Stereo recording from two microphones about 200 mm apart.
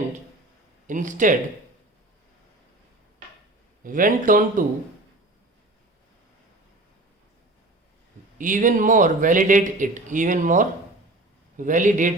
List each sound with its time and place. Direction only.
0.9 s speech: 40° right (ahead or behind)
3.8 s speech: 45° right (ahead or behind)
8.4 s speech: 40° right (ahead or behind)